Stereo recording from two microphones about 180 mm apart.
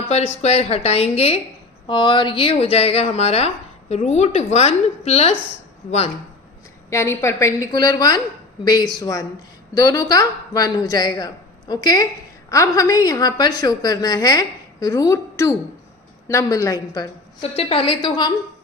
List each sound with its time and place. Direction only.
0.1 s speech: 35° left (ahead or behind)
6.9 s a woman's voice: 15° left (ahead or behind)
17.6 s a woman's voice: 30° left (ahead or behind)